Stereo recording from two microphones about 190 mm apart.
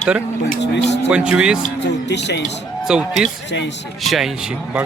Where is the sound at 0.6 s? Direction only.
65° left (ahead or behind).